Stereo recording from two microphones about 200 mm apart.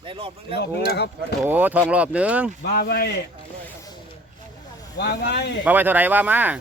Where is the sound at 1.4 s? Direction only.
10° right (ahead or behind).